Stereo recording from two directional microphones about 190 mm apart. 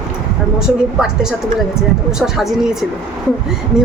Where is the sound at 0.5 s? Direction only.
5° right (ahead or behind).